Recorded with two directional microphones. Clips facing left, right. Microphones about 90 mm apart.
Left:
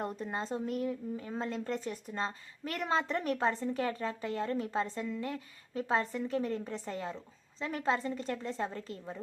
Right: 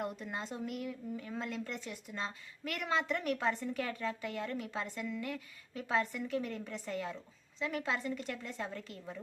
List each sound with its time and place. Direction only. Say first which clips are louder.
0.0 s a woman's voice: left 3 dB; 35° left (ahead or behind)